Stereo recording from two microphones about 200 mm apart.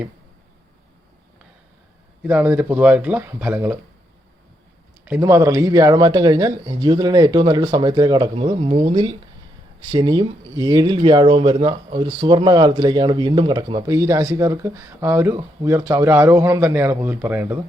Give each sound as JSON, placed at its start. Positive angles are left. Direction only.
{"t": 2.2, "sound": "speech", "side_deg": -10}
{"t": 5.0, "sound": "speech", "side_deg": -10}